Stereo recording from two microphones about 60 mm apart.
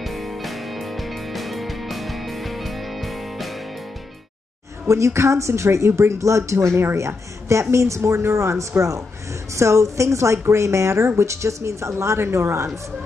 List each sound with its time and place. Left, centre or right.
0.0 s music: centre
4.8 s a woman's voice: right